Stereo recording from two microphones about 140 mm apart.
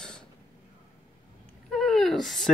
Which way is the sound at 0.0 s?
5° left (ahead or behind).